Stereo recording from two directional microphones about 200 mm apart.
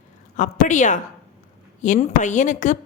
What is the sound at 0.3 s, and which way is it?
A woman's voice, 40° left (ahead or behind).